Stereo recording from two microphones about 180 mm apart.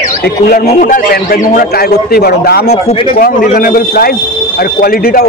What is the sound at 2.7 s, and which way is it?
Speech, 35° left (ahead or behind).